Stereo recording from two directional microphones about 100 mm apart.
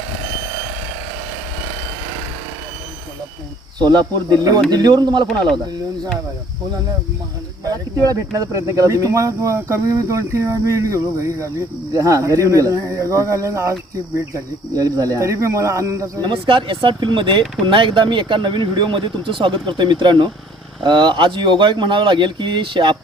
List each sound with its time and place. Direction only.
3.8 s speech: 45° right (ahead or behind)
8.1 s speech: 35° right (ahead or behind)
14.8 s speech: 40° right (ahead or behind)
16.2 s speech: 55° right (ahead or behind)